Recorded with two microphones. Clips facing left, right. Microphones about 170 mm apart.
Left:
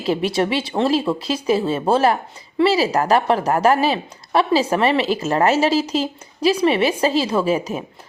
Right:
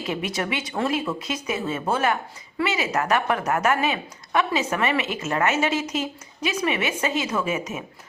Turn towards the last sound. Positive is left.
turn(degrees=30)  # may be behind; listen again after turning